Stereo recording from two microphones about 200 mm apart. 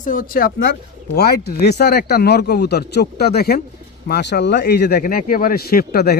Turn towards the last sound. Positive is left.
turn(degrees=50)  # may be behind; listen again after turning